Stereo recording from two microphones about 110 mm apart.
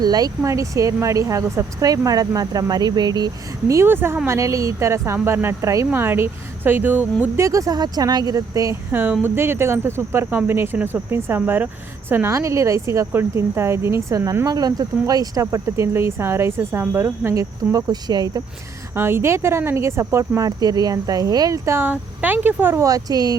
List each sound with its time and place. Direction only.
0.0 s speech: 35° right (ahead or behind); by 7.3 s 15° right (ahead or behind)
7.3 s speech: 30° right (ahead or behind)
8.9 s speech: 20° right (ahead or behind); by 18.4 s 35° right (ahead or behind)
18.9 s speech: 20° right (ahead or behind)